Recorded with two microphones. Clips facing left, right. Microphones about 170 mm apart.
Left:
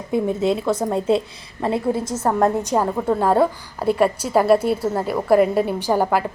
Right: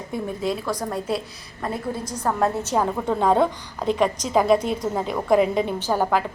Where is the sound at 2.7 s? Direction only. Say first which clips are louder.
Left 3 dB; 5° left (ahead or behind).